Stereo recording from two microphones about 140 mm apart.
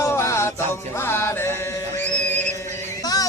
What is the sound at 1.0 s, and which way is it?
Music, 20° left (ahead or behind).